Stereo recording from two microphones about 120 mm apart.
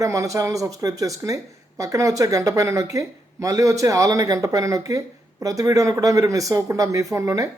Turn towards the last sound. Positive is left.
turn(degrees=-25)  # may be behind; listen again after turning